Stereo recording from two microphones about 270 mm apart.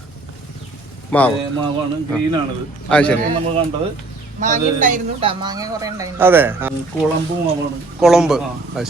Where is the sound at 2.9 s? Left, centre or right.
Centre.